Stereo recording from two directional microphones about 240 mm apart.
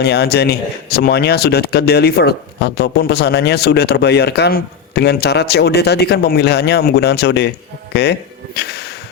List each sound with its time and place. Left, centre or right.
0.0 s speech: left
8.5 s music: left